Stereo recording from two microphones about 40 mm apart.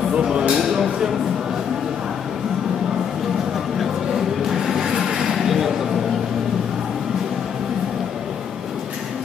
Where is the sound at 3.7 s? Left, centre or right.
Centre.